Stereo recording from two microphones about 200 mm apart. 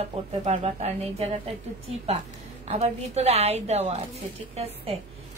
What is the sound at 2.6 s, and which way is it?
A woman's voice, 30° right (ahead or behind).